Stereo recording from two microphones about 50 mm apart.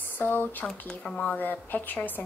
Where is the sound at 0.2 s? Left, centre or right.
Left.